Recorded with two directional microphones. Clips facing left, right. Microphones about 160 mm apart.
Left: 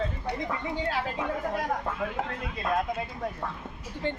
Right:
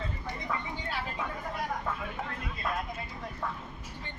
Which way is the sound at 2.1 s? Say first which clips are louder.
Left 5 dB; 75° left (ahead or behind).